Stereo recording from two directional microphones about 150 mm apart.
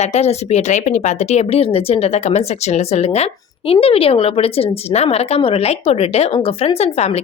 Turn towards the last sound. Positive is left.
turn(degrees=45)  # may be behind; listen again after turning